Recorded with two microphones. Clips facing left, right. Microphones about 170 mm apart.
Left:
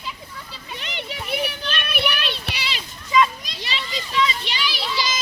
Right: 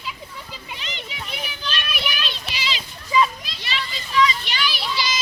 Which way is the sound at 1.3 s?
60° left (ahead or behind).